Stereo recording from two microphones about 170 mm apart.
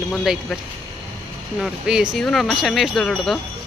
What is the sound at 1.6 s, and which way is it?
Speech, 5° right (ahead or behind).